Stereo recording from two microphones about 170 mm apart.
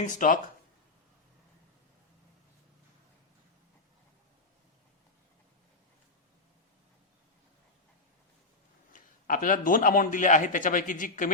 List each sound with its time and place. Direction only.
0.0 s speech: 50° left (ahead or behind)
8.9 s speech: 50° left (ahead or behind)